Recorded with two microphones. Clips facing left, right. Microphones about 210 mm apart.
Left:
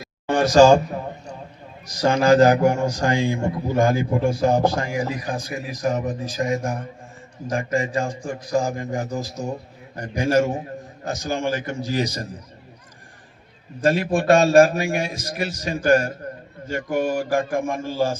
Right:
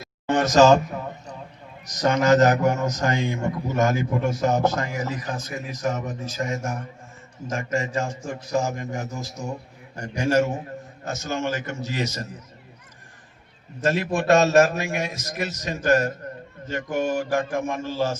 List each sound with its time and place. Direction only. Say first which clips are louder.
0.3 s speech: left 3 dB; 30° left (ahead or behind)
1.9 s a man's voice: left 2 dB; 30° left (ahead or behind)
5.0 s a man's voice: left 3 dB; 15° left (ahead or behind)
5.5 s a man's voice: left 3 dB; 30° left (ahead or behind)
13.8 s a man's voice: left 3 dB; 30° left (ahead or behind)